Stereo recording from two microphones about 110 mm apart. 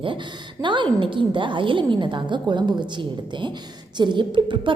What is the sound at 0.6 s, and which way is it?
A woman's voice, 45° right (ahead or behind).